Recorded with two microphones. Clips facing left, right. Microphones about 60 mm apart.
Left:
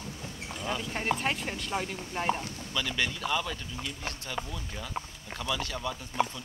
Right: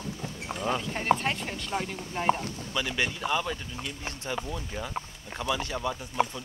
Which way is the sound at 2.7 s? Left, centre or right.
Centre.